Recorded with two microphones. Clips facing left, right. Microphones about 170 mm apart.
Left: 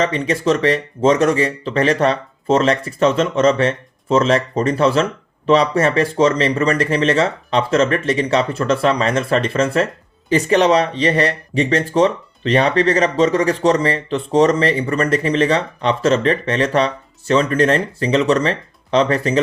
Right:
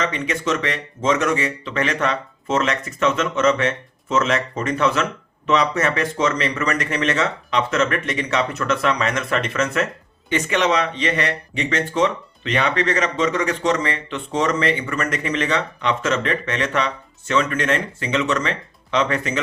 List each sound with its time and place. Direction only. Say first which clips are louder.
0.0 s speech: left 6 dB; 35° left (ahead or behind)